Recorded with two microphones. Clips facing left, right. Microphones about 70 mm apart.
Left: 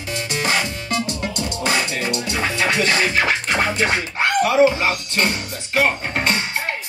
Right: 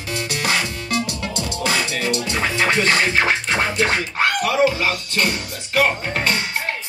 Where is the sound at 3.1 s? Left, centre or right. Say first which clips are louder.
Even; right.